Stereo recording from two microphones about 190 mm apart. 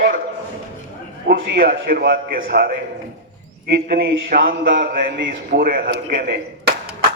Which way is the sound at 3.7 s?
60° right (ahead or behind).